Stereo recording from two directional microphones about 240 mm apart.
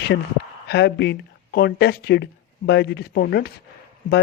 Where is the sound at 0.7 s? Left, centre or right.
Left.